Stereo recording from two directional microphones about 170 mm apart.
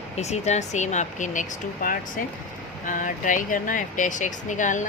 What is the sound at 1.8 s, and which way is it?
Speech, 55° left (ahead or behind).